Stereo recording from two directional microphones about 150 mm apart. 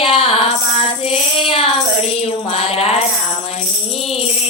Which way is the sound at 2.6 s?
45° left (ahead or behind).